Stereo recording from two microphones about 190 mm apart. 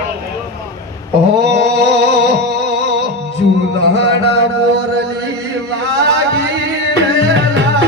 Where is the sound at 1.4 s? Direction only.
60° right (ahead or behind).